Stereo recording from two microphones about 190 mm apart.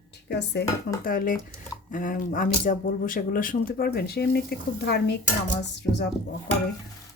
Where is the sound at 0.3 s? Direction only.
60° left (ahead or behind).